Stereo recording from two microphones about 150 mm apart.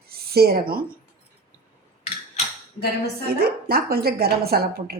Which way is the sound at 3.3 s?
90° right.